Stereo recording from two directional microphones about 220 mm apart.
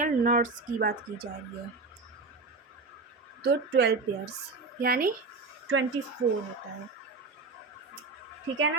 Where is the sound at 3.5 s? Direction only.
50° right (ahead or behind).